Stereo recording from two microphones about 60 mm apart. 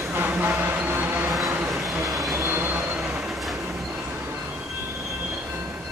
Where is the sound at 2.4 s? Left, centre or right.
Right.